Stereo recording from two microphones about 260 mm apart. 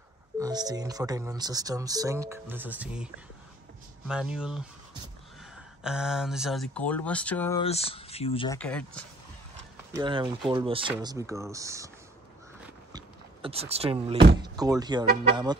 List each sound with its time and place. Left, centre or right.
0.4 s speech: centre
4.1 s speech: centre
5.9 s speech: centre
7.6 s speech: left
8.5 s speech: centre
9.9 s speech: centre
12.9 s a sound: right
14.4 s speech: centre